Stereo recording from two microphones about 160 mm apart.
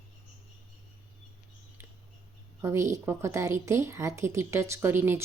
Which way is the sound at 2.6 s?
15° right (ahead or behind).